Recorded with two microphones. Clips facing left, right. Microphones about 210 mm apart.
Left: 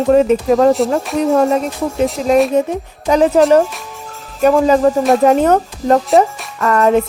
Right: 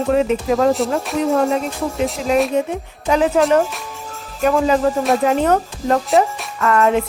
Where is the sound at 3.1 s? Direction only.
35° left (ahead or behind).